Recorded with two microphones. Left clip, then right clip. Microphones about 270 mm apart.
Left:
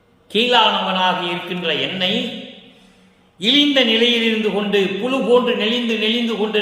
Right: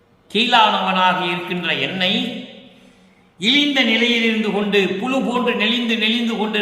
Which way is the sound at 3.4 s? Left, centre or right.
Centre.